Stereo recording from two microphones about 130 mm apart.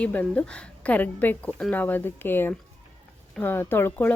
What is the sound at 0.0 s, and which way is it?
Speech, 10° left (ahead or behind).